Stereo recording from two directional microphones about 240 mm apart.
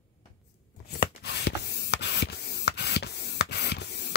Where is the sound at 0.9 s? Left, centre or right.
Left.